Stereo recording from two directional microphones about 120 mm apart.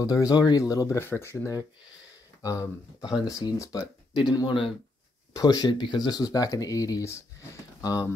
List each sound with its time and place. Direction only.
0.0 s speech: 30° left (ahead or behind)